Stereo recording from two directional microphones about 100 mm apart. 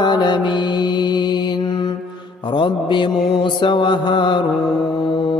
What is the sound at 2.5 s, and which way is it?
Mantra, 55° left (ahead or behind).